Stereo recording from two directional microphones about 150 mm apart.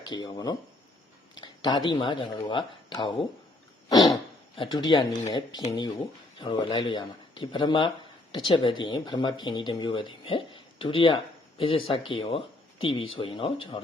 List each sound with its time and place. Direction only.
0.0 s speech: 30° left (ahead or behind)
3.8 s throat clearing: 25° left (ahead or behind)
4.5 s speech: 30° left (ahead or behind)